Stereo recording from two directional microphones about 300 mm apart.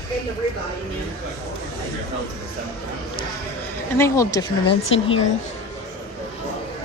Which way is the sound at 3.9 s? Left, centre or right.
Centre.